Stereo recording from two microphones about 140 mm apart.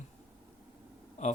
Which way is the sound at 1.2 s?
55° left (ahead or behind).